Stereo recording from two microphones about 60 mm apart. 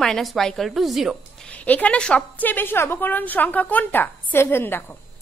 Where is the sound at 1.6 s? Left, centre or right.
Left.